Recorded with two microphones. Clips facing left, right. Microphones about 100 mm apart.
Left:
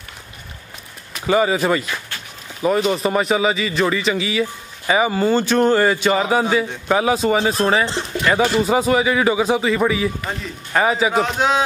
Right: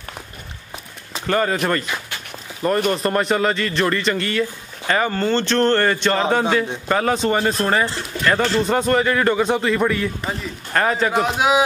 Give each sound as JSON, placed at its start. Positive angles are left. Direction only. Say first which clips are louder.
{"t": 1.2, "sound": "a man's voice", "louder": "left 3 dB", "side_deg": 5}
{"t": 2.9, "sound": "a man's voice", "louder": "left 1 dB", "side_deg": 0}
{"t": 7.8, "sound": "speech", "louder": "left 1 dB", "side_deg": 20}
{"t": 8.3, "sound": "a man's voice", "louder": "left 1 dB", "side_deg": 10}
{"t": 11.2, "sound": "a man's voice", "louder": "right 1 dB", "side_deg": -10}